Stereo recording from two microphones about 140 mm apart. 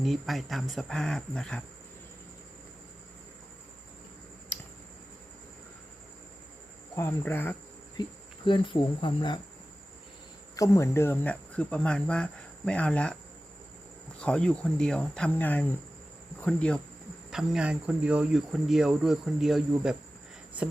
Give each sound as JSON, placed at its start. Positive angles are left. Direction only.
{"t": 0.0, "sound": "speech", "side_deg": 0}
{"t": 6.9, "sound": "speech", "side_deg": 15}
{"t": 8.0, "sound": "speech", "side_deg": 30}
{"t": 10.6, "sound": "speech", "side_deg": 20}
{"t": 14.2, "sound": "speech", "side_deg": 5}
{"t": 17.3, "sound": "speech", "side_deg": -5}